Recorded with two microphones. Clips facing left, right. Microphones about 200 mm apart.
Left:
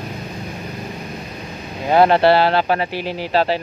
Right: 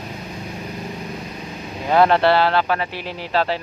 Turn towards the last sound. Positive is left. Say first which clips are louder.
# left 3 dB
turn(degrees=30)  # may be behind; listen again after turning